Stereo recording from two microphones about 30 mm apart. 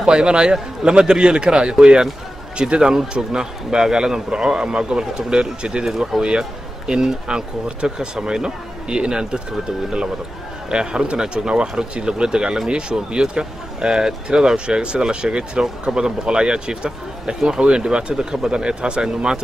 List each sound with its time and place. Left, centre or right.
0.0 s speech: right
6.1 s a man's voice: centre
6.9 s speech: right